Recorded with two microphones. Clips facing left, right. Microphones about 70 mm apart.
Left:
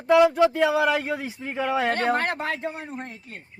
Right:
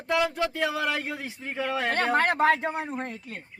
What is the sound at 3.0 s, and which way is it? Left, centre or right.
Speech, right.